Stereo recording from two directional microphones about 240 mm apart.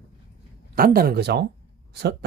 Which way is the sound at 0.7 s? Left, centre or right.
Right.